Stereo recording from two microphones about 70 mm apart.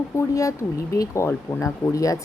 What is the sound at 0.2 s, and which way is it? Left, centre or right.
Speech, left.